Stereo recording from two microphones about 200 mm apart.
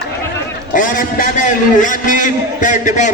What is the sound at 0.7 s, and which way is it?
A man's voice, 40° left (ahead or behind).